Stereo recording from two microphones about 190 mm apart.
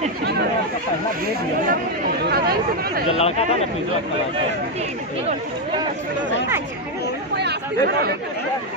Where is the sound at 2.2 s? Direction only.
55° right (ahead or behind).